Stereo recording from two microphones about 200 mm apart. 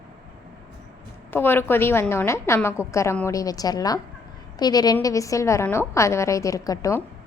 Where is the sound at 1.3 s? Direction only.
10° left (ahead or behind).